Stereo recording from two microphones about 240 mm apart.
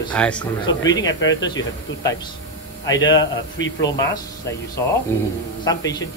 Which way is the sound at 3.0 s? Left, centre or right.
Left.